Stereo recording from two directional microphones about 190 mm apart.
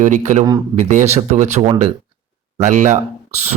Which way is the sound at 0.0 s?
40° right (ahead or behind).